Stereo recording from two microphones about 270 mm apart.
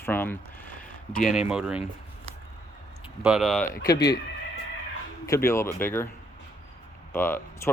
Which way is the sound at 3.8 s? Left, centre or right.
Centre.